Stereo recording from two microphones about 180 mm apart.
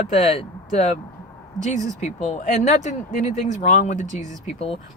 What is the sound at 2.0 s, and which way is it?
Speech, 40° left (ahead or behind).